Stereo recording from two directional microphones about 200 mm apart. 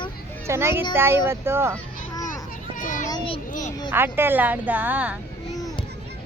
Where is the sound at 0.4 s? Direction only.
15° right (ahead or behind).